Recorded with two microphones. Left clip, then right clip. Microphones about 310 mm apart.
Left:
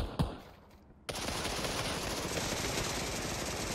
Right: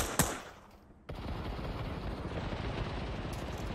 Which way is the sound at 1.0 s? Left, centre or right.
Left.